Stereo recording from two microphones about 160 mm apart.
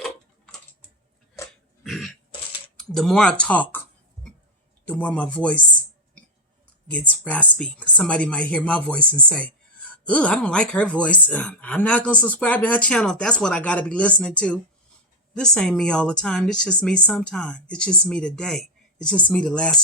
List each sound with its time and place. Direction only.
0.0 s tick-tock: 5° left (ahead or behind)
1.4 s dog: 20° left (ahead or behind)
1.8 s throat clearing: centre (ahead or behind)
2.7 s a sound: centre (ahead or behind)
4.9 s speech: 10° left (ahead or behind)
6.9 s speech: 10° left (ahead or behind)
9.3 s whispering: 10° left (ahead or behind)
10.1 s speech: 10° left (ahead or behind)